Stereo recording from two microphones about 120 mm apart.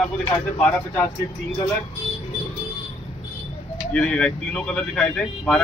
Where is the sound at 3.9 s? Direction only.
10° left (ahead or behind).